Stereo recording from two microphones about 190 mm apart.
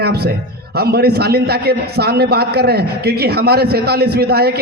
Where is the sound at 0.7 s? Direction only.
55° right (ahead or behind).